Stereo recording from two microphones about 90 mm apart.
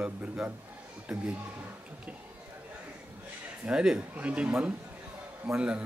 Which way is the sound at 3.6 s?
10° right (ahead or behind).